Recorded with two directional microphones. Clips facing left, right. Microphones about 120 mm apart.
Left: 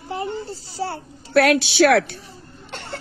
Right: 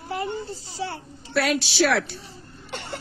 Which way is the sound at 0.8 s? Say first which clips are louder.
Left 4 dB; 40° left (ahead or behind).